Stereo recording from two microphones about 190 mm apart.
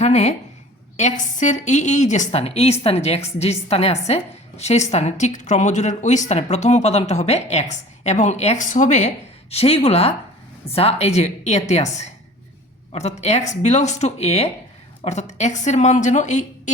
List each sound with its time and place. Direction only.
0.0 s a woman's voice: 35° left (ahead or behind)